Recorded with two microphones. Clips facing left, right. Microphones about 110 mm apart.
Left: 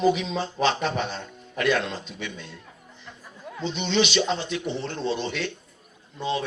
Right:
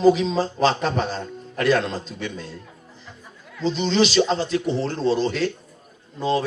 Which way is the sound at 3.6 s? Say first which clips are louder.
Right 5 dB; 35° right (ahead or behind).